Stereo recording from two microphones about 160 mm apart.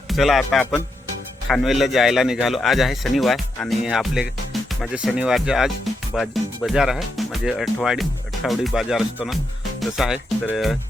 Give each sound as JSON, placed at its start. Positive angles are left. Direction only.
{"t": 0.1, "sound": "a man's voice", "side_deg": 0}